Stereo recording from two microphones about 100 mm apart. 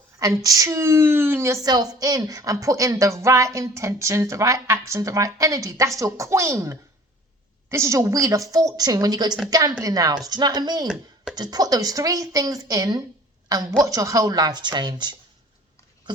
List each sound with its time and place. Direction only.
0.2 s a woman's voice: 35° right (ahead or behind)
1.6 s speech: 40° right (ahead or behind)